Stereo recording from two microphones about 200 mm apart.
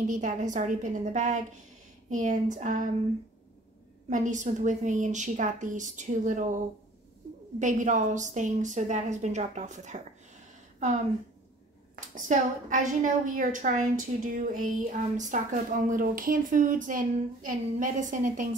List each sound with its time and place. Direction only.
0.0 s a woman's voice: 40° right (ahead or behind)
4.1 s a woman's voice: 40° right (ahead or behind)
11.9 s a woman's voice: 40° right (ahead or behind)